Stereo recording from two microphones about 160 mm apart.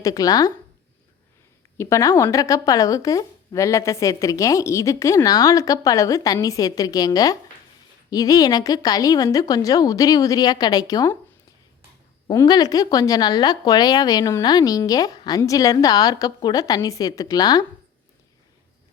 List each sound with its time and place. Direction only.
0.0 s a woman's voice: 25° left (ahead or behind)
1.8 s a woman's voice: 20° left (ahead or behind)
12.3 s a woman's voice: 25° left (ahead or behind)